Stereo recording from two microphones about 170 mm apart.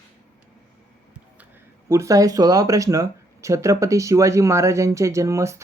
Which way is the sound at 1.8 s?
15° right (ahead or behind).